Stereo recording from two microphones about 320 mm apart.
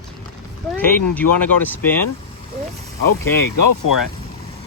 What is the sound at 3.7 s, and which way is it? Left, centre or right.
Speech, left.